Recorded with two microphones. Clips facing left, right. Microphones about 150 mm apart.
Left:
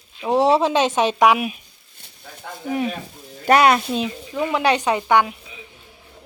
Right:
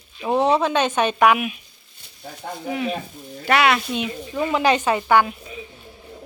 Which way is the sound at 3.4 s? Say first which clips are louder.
Left 4 dB; 40° left (ahead or behind).